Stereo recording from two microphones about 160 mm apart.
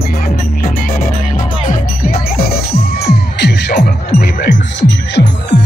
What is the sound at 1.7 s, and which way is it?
Music, 65° left (ahead or behind).